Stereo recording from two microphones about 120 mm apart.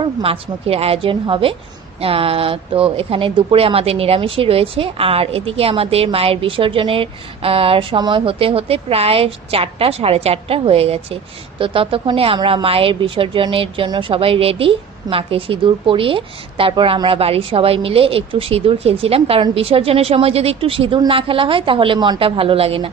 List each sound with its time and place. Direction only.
0.0 s speech: 50° right (ahead or behind)
22.2 s speech: 50° right (ahead or behind)